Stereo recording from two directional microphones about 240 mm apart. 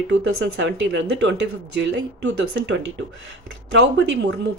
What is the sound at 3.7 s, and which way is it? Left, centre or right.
Speech, right.